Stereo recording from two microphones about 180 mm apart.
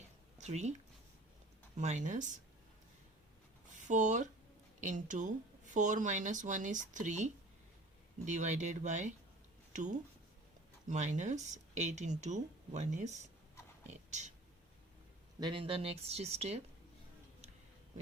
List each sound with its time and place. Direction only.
0.3 s a sound: 40° right (ahead or behind)
1.7 s speech: 40° right (ahead or behind)
3.8 s speech: 45° right (ahead or behind)
10.8 s speech: 40° right (ahead or behind)
13.8 s whispering: 40° right (ahead or behind)
15.4 s speech: 25° right (ahead or behind)